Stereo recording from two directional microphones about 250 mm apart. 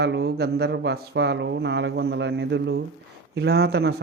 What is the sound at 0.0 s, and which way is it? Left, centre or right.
A man's voice, right.